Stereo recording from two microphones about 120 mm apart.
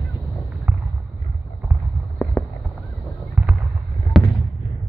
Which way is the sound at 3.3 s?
10° right (ahead or behind).